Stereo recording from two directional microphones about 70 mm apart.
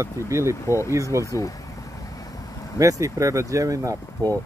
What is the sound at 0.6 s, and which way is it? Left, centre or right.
Speech, left.